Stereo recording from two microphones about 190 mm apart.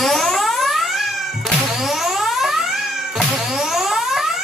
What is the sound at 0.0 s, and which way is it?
Music, centre (ahead or behind).